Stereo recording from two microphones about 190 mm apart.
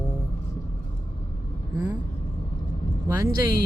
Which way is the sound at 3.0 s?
15° right (ahead or behind).